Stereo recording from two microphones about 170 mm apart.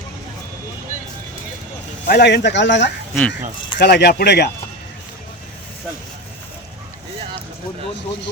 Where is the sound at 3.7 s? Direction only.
70° left (ahead or behind).